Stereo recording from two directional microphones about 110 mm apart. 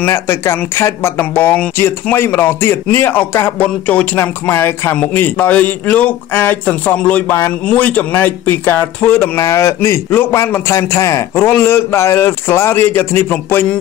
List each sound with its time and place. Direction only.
0.0 s a man's voice: 25° left (ahead or behind)